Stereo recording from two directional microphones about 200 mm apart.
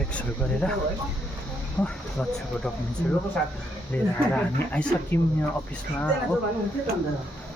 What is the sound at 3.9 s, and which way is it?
Speech, 5° left (ahead or behind).